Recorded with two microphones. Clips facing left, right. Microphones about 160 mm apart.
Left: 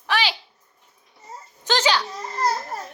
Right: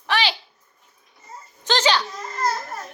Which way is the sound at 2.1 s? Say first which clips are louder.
Left 1 dB; 35° left (ahead or behind).